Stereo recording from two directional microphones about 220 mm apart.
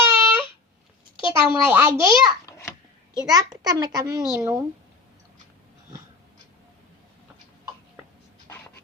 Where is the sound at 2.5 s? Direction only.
15° left (ahead or behind).